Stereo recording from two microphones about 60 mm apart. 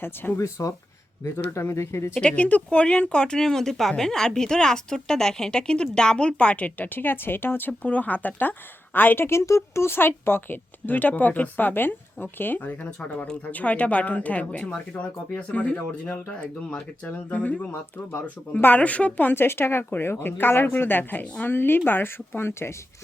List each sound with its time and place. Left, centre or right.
0.3 s speech: left
2.2 s speech: left
7.8 s speech: left
9.5 s speech: left
19.3 s speech: left